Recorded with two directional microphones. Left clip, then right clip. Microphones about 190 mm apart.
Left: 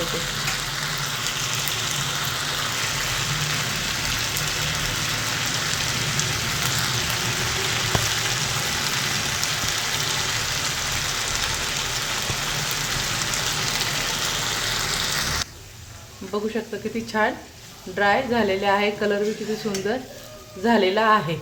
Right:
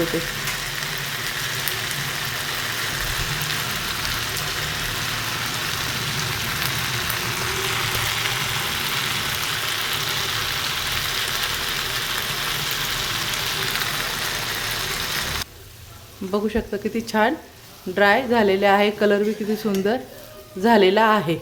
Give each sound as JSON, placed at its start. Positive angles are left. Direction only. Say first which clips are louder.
{"t": 17.1, "sound": "a woman's voice", "louder": "right 2 dB", "side_deg": -45}
{"t": 20.7, "sound": "a woman's voice", "louder": "right 3 dB", "side_deg": -35}